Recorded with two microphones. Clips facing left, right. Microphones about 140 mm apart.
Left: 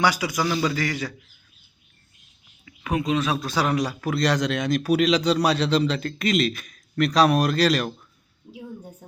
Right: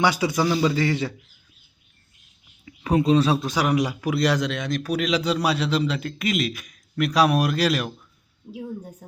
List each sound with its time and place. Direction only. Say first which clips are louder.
0.0 s a man's voice: right 2 dB; 25° right (ahead or behind)
2.6 s speech: right 5 dB; 30° right (ahead or behind)
3.4 s a man's voice: right 1 dB; 15° right (ahead or behind)